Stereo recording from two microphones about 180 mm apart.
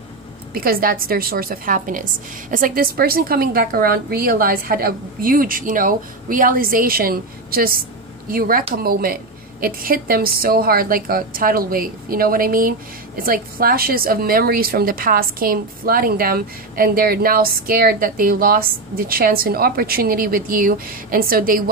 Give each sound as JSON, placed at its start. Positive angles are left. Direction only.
{"t": 0.6, "sound": "a woman's voice", "side_deg": -55}